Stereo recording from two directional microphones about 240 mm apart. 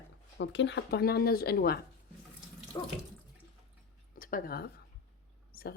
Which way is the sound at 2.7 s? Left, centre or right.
Centre.